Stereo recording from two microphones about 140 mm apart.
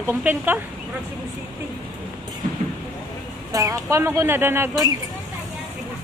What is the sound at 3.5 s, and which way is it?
Speech, 25° right (ahead or behind).